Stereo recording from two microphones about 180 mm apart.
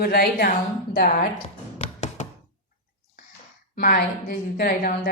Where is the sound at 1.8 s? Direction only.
40° left (ahead or behind).